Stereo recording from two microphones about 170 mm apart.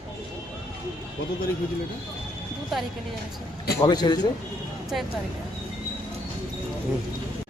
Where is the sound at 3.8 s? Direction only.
25° left (ahead or behind).